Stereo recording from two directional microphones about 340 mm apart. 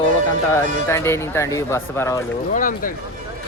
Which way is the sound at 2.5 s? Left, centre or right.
Left.